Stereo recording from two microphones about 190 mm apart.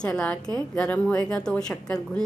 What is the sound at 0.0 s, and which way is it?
Speech, 5° left (ahead or behind).